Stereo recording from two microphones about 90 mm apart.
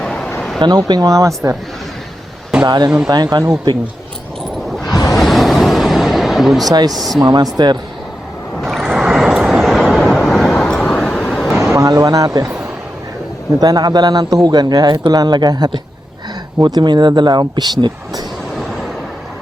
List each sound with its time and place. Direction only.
0.0 s a sound: 10° left (ahead or behind)
0.9 s speech: 45° right (ahead or behind)
2.6 s speech: 50° right (ahead or behind)
4.9 s a sound: 45° left (ahead or behind)
5.1 s vehicle: centre (ahead or behind)
6.7 s speech: 45° right (ahead or behind)
6.9 s speech: centre (ahead or behind)
7.2 s speech: 50° right (ahead or behind)
8.8 s vehicle: 5° right (ahead or behind)
11.5 s vehicle: 30° right (ahead or behind)
11.9 s speech: 45° right (ahead or behind)
13.6 s speech: 45° right (ahead or behind)